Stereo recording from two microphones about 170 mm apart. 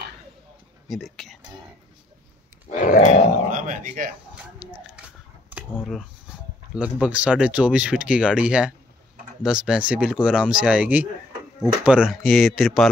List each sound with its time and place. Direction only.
0.8 s speech: centre (ahead or behind)
2.7 s grunt: 50° left (ahead or behind)
3.5 s speech: 50° right (ahead or behind)
4.4 s a sound: 5° right (ahead or behind)
6.7 s speech: 5° right (ahead or behind)